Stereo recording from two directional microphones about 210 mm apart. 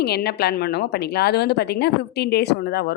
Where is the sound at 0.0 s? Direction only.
50° left (ahead or behind).